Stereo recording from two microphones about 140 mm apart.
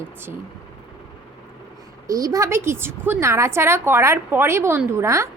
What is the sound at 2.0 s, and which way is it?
A woman's voice, 25° right (ahead or behind).